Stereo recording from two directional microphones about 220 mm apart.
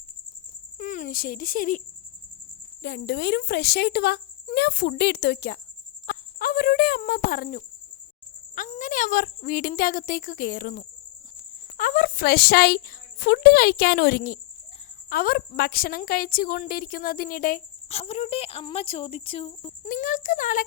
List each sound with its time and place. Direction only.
0.8 s speech: 35° left (ahead or behind)
2.8 s speech: 50° left (ahead or behind)
6.1 s cricket: 40° left (ahead or behind)
8.5 s a woman's voice: 35° left (ahead or behind)
17.9 s speech: 30° left (ahead or behind)
19.9 s a woman's voice: 35° left (ahead or behind)